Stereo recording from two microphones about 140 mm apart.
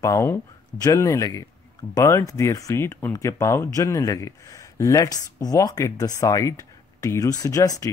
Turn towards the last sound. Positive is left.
turn(degrees=25)  # may be behind; listen again after turning